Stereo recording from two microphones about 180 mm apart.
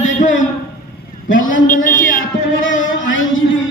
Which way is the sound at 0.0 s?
45° left (ahead or behind).